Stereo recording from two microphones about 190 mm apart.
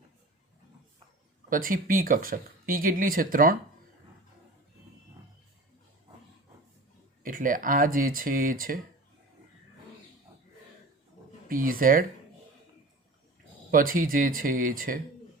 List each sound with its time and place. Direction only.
1.5 s speech: 45° right (ahead or behind)
7.2 s speech: 45° right (ahead or behind)
11.4 s speech: 50° right (ahead or behind)
13.7 s speech: 45° right (ahead or behind)